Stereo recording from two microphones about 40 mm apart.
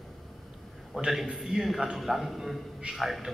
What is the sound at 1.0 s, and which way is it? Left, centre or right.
Speech, right.